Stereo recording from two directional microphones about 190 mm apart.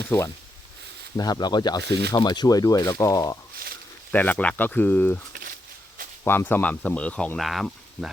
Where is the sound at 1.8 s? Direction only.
60° right (ahead or behind).